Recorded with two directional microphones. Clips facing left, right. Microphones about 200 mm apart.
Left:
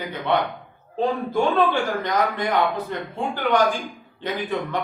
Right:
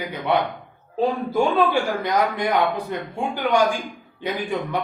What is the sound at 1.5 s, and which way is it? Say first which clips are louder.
A man's voice: right 1 dB; 10° right (ahead or behind).